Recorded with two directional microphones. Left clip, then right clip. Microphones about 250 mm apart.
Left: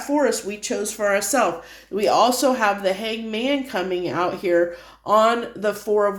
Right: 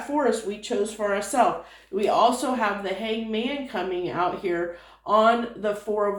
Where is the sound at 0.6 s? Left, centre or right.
Left.